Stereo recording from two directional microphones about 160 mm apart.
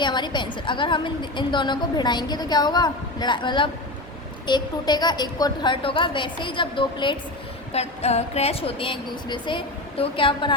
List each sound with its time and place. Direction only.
0.0 s a woman's voice: 30° left (ahead or behind)
7.7 s speech: 40° left (ahead or behind)